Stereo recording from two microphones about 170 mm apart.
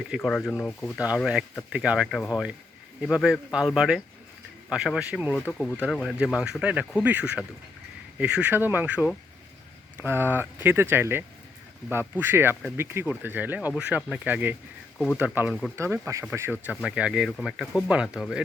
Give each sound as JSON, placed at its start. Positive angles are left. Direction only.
{"t": 0.2, "sound": "speech", "side_deg": 5}
{"t": 0.9, "sound": "speech", "side_deg": -5}
{"t": 5.3, "sound": "speech", "side_deg": 5}
{"t": 14.9, "sound": "speech", "side_deg": 5}
{"t": 15.2, "sound": "speech", "side_deg": -10}